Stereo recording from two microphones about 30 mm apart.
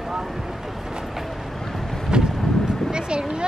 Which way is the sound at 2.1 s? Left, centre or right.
Right.